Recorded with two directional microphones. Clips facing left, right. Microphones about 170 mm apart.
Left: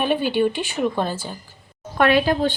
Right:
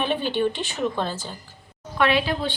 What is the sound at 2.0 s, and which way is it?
Speech, 45° left (ahead or behind).